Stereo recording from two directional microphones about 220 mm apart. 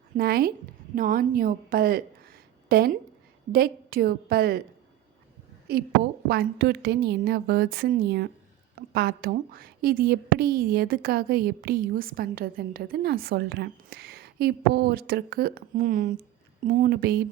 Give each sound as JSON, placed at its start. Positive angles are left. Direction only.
{"t": 0.2, "sound": "a woman's voice", "side_deg": -45}
{"t": 5.6, "sound": "a woman's voice", "side_deg": -45}